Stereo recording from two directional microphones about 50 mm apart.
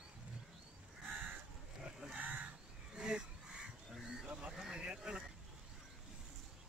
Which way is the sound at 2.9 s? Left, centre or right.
Centre.